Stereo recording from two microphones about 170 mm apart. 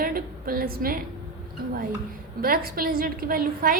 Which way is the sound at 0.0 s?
60° right (ahead or behind).